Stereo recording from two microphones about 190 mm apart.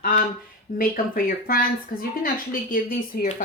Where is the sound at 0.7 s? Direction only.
50° left (ahead or behind).